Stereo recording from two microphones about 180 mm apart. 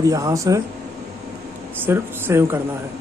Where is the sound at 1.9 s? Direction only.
15° right (ahead or behind).